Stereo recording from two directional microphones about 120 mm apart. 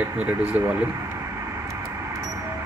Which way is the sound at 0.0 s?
15° right (ahead or behind).